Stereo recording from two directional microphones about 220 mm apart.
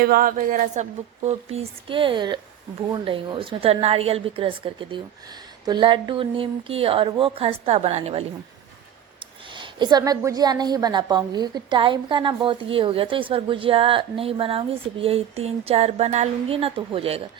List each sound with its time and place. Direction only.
0.0 s a woman's voice: 40° right (ahead or behind)
9.6 s a woman's voice: 20° right (ahead or behind)